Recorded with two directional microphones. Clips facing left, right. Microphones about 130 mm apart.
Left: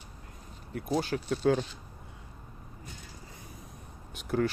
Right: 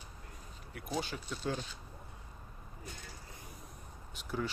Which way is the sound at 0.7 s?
50° left (ahead or behind).